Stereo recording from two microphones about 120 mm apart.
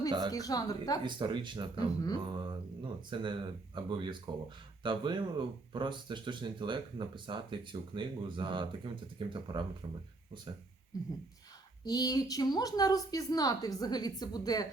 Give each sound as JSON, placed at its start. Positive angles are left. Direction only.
{"t": 0.1, "sound": "speech", "side_deg": -35}
{"t": 0.3, "sound": "a woman's voice", "side_deg": 30}
{"t": 1.0, "sound": "speech", "side_deg": -40}
{"t": 10.9, "sound": "a sound", "side_deg": 30}
{"t": 11.9, "sound": "a woman's voice", "side_deg": 30}